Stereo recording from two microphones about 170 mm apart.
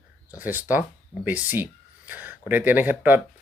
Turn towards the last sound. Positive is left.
turn(degrees=-10)  # may be behind; listen again after turning